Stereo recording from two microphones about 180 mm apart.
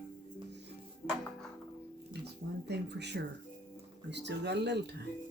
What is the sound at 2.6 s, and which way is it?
Speech, 70° right (ahead or behind).